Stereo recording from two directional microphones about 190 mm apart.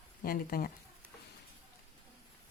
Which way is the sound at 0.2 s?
50° left (ahead or behind).